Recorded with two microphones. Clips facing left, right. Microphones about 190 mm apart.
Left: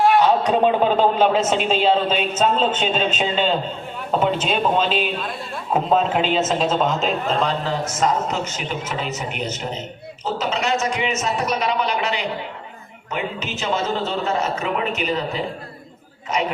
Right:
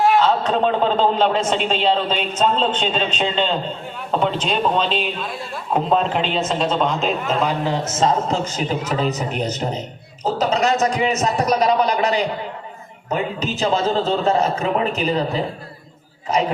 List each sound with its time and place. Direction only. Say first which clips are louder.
0.2 s a man's voice: left 1 dB; 15° left (ahead or behind); by 7.5 s centre (ahead or behind)
7.6 s a man's voice: right 2 dB; 20° right (ahead or behind)